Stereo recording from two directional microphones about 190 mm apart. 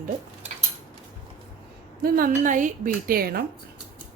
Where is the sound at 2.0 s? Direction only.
50° right (ahead or behind).